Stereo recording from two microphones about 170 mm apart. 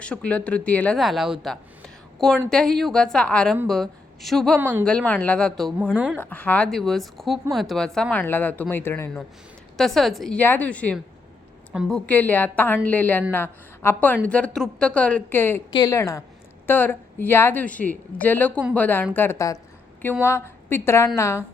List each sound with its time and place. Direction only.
0.0 s a woman's voice: 5° left (ahead or behind)
9.7 s a woman's voice: centre (ahead or behind)